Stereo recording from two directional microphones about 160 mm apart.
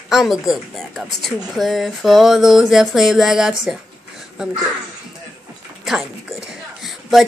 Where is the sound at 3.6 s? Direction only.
Centre (ahead or behind).